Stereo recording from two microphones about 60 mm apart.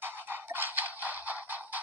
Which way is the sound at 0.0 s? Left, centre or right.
Right.